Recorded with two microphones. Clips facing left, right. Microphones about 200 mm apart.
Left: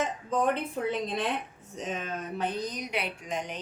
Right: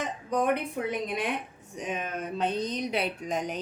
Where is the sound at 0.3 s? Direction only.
15° right (ahead or behind).